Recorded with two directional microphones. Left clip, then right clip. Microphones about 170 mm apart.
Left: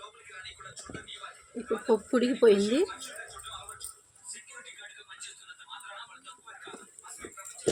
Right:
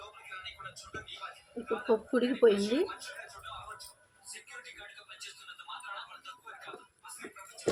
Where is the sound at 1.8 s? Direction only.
55° left (ahead or behind).